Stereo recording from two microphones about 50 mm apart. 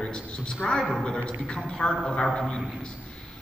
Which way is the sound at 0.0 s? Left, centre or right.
Centre.